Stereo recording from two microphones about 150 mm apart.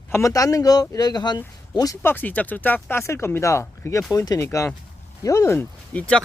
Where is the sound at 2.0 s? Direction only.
15° left (ahead or behind).